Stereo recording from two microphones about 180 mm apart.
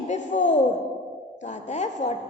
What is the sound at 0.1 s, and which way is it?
A man's voice, 40° left (ahead or behind).